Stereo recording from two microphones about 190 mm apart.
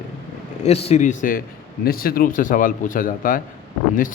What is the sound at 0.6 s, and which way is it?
A man's voice, 35° left (ahead or behind).